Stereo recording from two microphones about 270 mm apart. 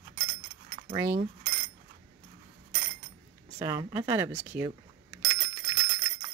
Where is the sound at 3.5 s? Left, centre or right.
Centre.